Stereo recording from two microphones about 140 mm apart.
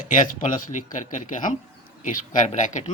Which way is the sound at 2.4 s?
55° left (ahead or behind).